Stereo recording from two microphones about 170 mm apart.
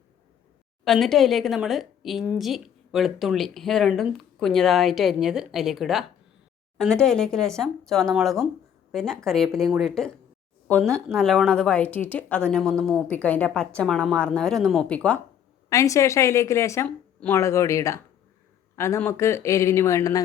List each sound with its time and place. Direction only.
0.9 s a woman's voice: centre (ahead or behind)
15.7 s a woman's voice: 20° left (ahead or behind)